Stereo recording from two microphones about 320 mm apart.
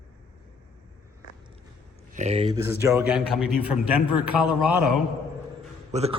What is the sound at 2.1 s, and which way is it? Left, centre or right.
A man's voice, right.